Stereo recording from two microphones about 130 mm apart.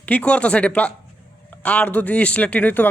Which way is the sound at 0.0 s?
10° left (ahead or behind).